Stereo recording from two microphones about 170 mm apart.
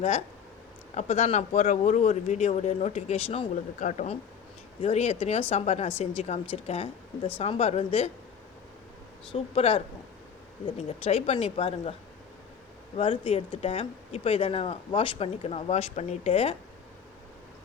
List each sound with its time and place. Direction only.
0.9 s speech: 40° left (ahead or behind)
9.3 s speech: 35° left (ahead or behind)
13.0 s speech: 30° left (ahead or behind)